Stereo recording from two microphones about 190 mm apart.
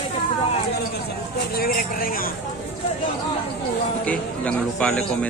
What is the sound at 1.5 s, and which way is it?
Speech, 50° left (ahead or behind).